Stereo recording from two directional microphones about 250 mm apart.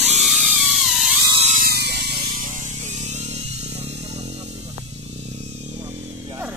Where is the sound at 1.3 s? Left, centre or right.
Right.